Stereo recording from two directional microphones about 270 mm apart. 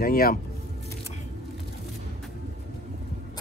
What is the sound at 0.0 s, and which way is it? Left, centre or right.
Speech, left.